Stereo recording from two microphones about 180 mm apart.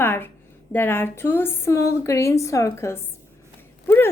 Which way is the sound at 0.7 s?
10° left (ahead or behind).